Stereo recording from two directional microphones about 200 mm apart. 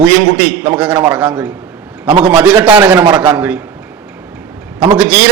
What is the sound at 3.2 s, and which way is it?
Speech, 5° right (ahead or behind).